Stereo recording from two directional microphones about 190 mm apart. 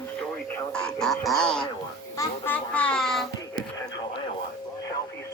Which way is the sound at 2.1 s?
10° left (ahead or behind).